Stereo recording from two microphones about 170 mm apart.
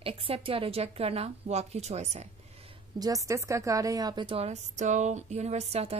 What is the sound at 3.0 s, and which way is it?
A woman's voice, 20° right (ahead or behind).